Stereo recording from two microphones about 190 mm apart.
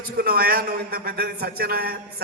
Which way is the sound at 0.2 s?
50° right (ahead or behind).